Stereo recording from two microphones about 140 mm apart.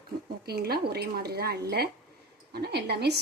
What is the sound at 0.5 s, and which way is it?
Speech, 90° right.